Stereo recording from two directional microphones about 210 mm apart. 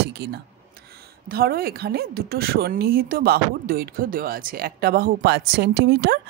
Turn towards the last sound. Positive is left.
turn(degrees=-50)  # may be behind; listen again after turning